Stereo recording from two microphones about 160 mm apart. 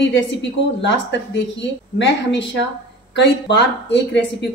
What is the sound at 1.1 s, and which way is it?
Speech, 90° left.